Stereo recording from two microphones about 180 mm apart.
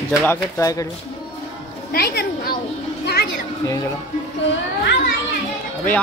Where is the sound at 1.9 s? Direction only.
60° left (ahead or behind).